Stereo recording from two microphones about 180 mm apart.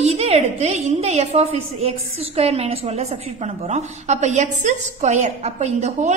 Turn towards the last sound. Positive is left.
turn(degrees=-40)  # may be behind; listen again after turning